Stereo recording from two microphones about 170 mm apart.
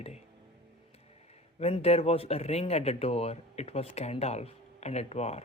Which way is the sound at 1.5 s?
35° left (ahead or behind).